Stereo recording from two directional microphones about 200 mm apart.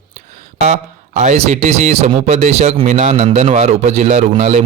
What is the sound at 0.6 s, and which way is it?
Speech, 35° right (ahead or behind).